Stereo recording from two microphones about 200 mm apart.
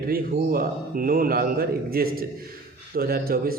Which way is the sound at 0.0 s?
50° right (ahead or behind).